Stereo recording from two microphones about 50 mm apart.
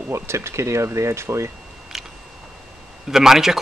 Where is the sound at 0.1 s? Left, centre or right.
Right.